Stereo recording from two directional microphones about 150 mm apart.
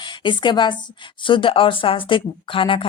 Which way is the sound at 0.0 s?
30° left (ahead or behind).